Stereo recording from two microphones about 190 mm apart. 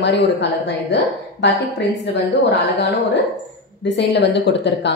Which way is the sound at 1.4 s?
65° left (ahead or behind).